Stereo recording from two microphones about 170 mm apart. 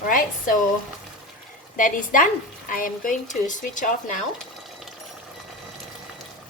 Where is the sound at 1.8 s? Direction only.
50° left (ahead or behind).